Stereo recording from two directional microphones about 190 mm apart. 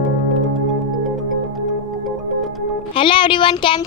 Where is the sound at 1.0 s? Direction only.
Centre (ahead or behind).